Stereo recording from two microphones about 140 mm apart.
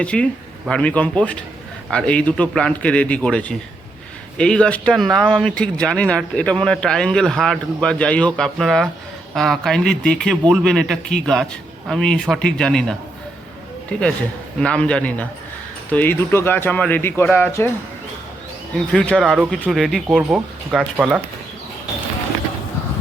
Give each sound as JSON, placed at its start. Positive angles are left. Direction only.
{"t": 0.0, "sound": "speech", "side_deg": 10}
{"t": 18.9, "sound": "speech", "side_deg": 5}